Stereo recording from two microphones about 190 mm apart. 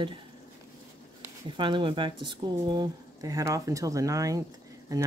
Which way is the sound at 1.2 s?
25° right (ahead or behind).